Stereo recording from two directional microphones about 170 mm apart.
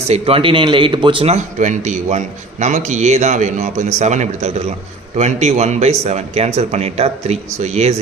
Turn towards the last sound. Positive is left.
turn(degrees=-40)  # may be behind; listen again after turning